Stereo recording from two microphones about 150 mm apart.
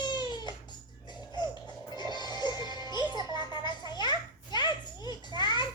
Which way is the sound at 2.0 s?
30° left (ahead or behind).